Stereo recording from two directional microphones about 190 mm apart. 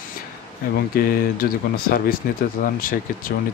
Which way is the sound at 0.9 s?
50° left (ahead or behind).